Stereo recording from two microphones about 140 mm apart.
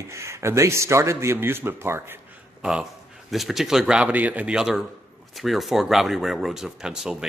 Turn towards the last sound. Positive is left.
turn(degrees=-5)  # may be behind; listen again after turning